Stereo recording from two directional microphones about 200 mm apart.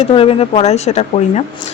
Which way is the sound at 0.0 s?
30° left (ahead or behind).